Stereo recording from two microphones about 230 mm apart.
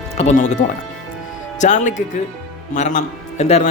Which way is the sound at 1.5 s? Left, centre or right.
Left.